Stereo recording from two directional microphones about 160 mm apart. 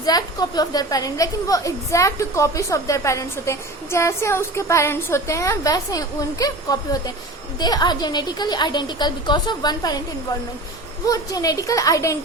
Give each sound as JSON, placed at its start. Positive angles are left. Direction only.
{"t": 0.0, "sound": "a woman's voice", "side_deg": 25}
{"t": 11.0, "sound": "a woman's voice", "side_deg": 20}